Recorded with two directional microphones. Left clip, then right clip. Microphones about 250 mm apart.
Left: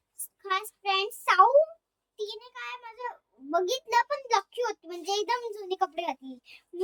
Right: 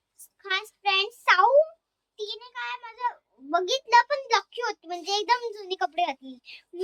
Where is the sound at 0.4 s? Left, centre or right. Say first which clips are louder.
Right 2 dB; centre.